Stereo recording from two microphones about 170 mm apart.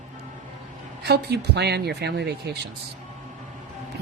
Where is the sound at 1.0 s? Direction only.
80° right.